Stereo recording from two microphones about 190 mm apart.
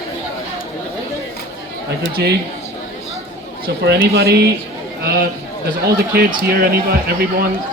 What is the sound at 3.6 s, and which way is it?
A man's voice, 55° right (ahead or behind).